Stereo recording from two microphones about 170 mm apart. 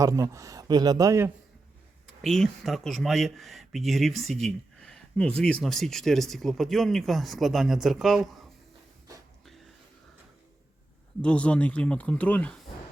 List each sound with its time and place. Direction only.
0.0 s speech: 20° right (ahead or behind)
2.2 s speech: centre (ahead or behind)
11.2 s speech: 5° left (ahead or behind)